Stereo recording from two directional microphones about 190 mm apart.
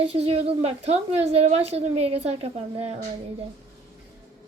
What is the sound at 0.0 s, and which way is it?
A woman's voice, 30° right (ahead or behind).